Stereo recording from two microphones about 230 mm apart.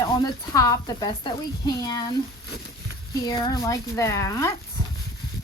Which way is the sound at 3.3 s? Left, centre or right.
Centre.